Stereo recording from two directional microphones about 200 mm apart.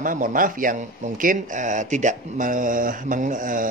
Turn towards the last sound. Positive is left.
turn(degrees=-40)  # may be behind; listen again after turning